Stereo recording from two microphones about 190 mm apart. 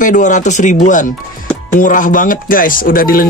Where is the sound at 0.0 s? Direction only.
40° left (ahead or behind).